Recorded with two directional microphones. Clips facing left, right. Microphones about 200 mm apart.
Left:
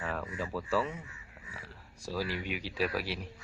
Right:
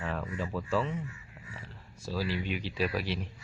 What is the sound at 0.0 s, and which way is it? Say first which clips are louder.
Speech: right 1 dB; 5° left (ahead or behind).